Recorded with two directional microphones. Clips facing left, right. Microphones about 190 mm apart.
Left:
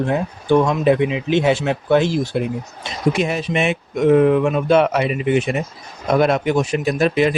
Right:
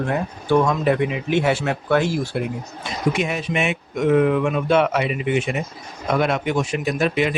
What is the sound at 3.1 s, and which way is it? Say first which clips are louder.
Speech: left 3 dB; 35° left (ahead or behind).